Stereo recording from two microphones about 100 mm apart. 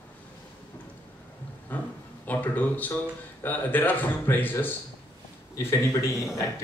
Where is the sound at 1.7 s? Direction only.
20° left (ahead or behind).